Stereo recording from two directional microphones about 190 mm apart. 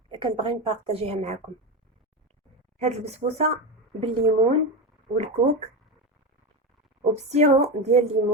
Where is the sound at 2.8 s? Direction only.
35° right (ahead or behind).